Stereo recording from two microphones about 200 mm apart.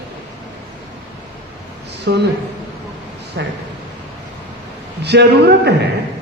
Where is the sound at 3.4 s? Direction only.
60° right (ahead or behind).